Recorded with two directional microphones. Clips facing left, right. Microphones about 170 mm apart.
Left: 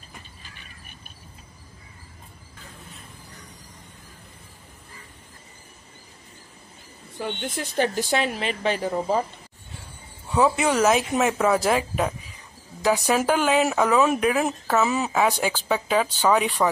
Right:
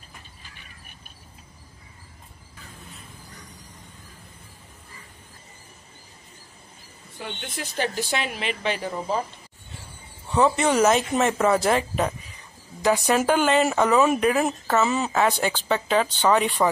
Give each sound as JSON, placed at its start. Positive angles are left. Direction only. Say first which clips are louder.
{"t": 7.8, "sound": "a woman's voice", "louder": "left 4 dB", "side_deg": 40}
{"t": 10.3, "sound": "speech", "louder": "even", "side_deg": 5}